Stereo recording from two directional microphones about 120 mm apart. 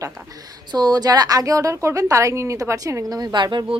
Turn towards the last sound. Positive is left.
turn(degrees=-40)  # may be behind; listen again after turning